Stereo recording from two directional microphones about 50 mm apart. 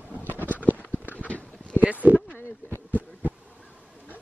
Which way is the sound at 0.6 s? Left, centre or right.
Right.